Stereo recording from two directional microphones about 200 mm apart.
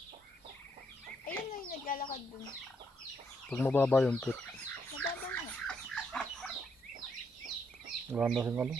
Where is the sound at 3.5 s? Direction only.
10° left (ahead or behind).